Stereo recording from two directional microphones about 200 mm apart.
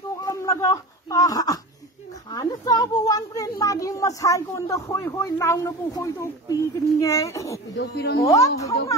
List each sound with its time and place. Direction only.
0.2 s a sound: 15° left (ahead or behind)
2.3 s a child's voice: 20° left (ahead or behind)
7.7 s speech: 55° left (ahead or behind)
8.3 s speech: 15° left (ahead or behind)